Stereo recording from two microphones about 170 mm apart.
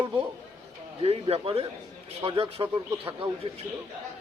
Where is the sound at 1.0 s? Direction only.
35° right (ahead or behind).